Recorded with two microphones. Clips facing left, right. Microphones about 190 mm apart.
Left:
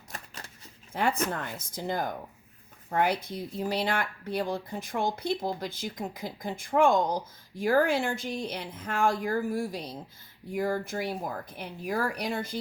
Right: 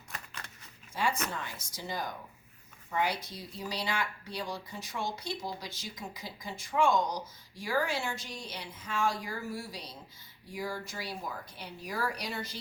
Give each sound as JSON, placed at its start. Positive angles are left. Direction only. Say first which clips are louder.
{"t": 0.1, "sound": "shuffling cards", "louder": "left 2 dB", "side_deg": 40}
{"t": 0.9, "sound": "speech", "louder": "left 5 dB", "side_deg": 60}